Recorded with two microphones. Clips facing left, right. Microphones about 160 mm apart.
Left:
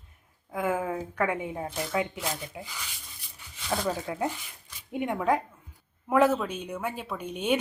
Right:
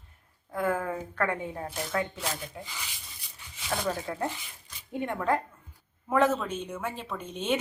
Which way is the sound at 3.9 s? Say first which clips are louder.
Even; 10° left (ahead or behind).